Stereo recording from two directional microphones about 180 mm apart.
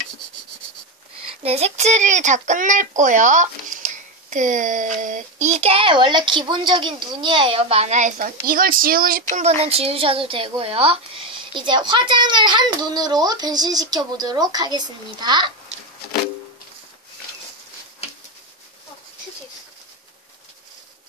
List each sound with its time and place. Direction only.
1.4 s speech: 35° right (ahead or behind)
8.5 s speech: 55° right (ahead or behind)
9.3 s a woman's voice: 35° right (ahead or behind)